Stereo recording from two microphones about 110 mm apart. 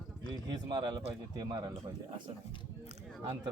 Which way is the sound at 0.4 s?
40° right (ahead or behind).